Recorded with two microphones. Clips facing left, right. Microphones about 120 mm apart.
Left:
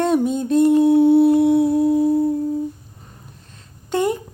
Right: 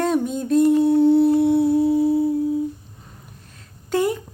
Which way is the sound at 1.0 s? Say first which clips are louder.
Even; 55° left (ahead or behind).